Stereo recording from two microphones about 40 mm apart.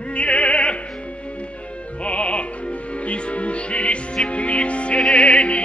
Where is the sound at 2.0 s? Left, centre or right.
Left.